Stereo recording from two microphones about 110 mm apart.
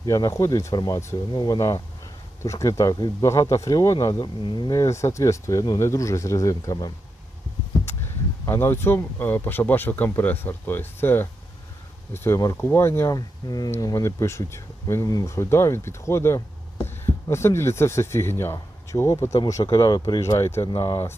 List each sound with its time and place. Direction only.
0.0 s speech: 30° left (ahead or behind)
3.2 s speech: 25° left (ahead or behind); by 4.7 s 40° left (ahead or behind)
4.7 s speech: 25° left (ahead or behind)
8.4 s speech: 20° left (ahead or behind)
13.1 s speech: 35° left (ahead or behind)
20.2 s speech: 25° left (ahead or behind)